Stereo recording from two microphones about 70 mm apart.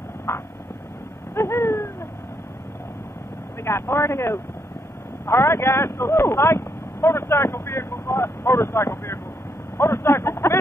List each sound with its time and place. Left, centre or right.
0.3 s vehicle: left
1.3 s a sound: left
3.6 s speech: left